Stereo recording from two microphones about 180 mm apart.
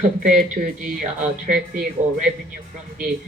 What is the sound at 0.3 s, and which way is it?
Speech, 50° right (ahead or behind).